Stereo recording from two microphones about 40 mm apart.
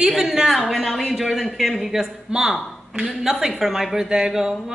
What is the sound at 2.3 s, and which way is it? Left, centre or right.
A woman's voice, centre.